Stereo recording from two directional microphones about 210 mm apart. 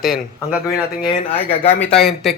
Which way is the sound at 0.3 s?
20° left (ahead or behind).